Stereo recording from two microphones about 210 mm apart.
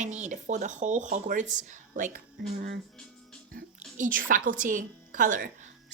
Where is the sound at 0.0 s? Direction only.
35° right (ahead or behind).